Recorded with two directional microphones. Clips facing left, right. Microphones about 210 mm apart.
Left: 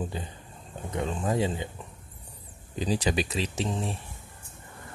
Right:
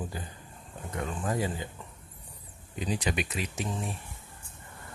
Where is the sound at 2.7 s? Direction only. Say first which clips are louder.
Left 4 dB; 30° left (ahead or behind).